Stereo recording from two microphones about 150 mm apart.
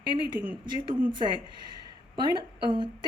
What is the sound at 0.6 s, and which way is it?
Speech, 30° right (ahead or behind).